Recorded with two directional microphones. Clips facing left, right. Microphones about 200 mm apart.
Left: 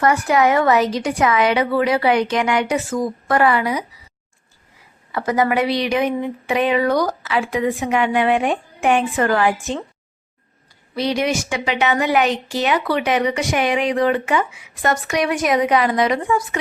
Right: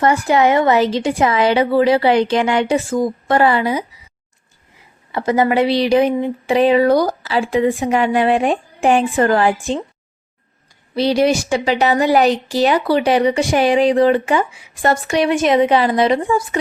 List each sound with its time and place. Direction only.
0.0 s a woman's voice: 25° right (ahead or behind)
5.1 s a woman's voice: 25° right (ahead or behind)
10.9 s a woman's voice: 30° right (ahead or behind)